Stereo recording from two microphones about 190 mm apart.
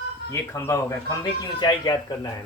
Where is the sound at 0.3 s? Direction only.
15° left (ahead or behind).